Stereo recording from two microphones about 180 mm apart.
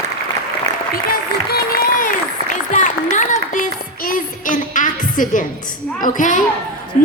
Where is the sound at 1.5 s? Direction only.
55° left (ahead or behind).